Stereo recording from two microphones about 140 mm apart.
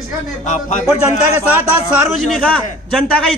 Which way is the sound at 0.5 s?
65° left (ahead or behind).